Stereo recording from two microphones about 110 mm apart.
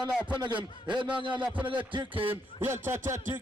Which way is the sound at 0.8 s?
45° right (ahead or behind).